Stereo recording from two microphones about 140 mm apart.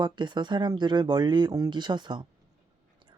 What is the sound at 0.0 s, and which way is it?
Speech, 30° right (ahead or behind).